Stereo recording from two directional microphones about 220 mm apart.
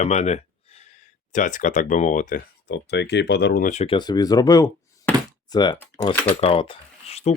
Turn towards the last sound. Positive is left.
turn(degrees=30)  # may be behind; listen again after turning